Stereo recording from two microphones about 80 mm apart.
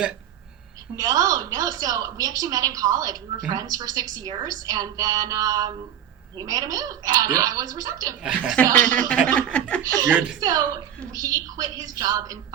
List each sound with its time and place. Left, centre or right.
0.9 s a woman's voice: right
8.8 s chuckle: centre
9.8 s a woman's voice: right